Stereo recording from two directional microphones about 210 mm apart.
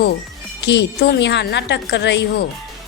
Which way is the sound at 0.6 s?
55° left (ahead or behind).